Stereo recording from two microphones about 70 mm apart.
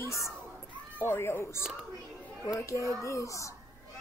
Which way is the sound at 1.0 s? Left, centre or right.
Left.